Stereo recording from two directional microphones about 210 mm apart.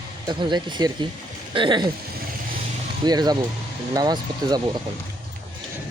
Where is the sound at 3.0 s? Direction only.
20° right (ahead or behind).